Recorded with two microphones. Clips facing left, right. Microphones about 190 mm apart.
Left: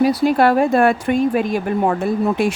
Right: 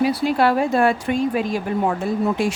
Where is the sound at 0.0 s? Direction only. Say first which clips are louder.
Left 4 dB; 40° left (ahead or behind).